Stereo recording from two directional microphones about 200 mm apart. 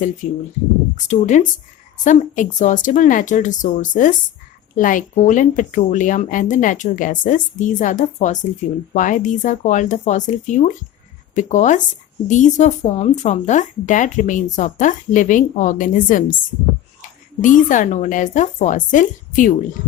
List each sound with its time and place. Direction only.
0.2 s speech: 40° left (ahead or behind)